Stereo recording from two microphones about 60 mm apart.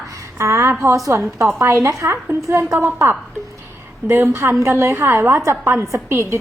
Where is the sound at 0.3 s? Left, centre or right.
Right.